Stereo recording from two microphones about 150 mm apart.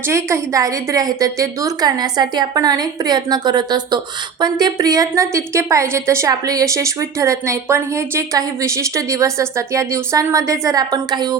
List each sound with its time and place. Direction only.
0.1 s a woman's voice: 20° right (ahead or behind)